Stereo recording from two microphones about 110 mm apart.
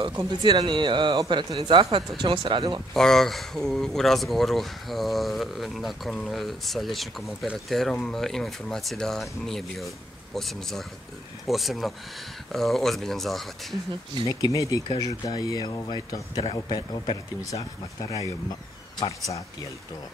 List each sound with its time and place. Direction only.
0.1 s speech: 35° right (ahead or behind); by 2.8 s 50° right (ahead or behind)
2.9 s speech: 5° left (ahead or behind)
14.4 s speech: 30° left (ahead or behind)